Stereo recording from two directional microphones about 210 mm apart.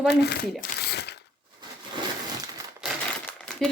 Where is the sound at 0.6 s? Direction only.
50° left (ahead or behind).